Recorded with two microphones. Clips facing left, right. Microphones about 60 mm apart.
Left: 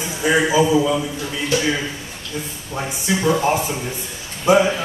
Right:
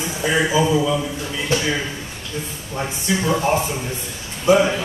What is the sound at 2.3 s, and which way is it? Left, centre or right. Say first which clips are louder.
Speech: left 1 dB; centre.